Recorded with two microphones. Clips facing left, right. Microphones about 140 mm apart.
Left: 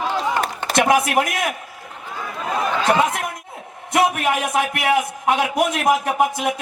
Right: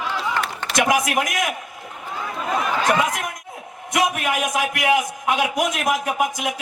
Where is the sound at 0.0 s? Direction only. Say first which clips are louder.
Left 4 dB; 40° left (ahead or behind).